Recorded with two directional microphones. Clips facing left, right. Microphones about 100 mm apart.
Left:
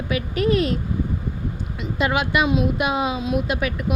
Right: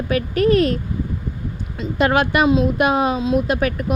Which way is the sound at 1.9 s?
50° right (ahead or behind).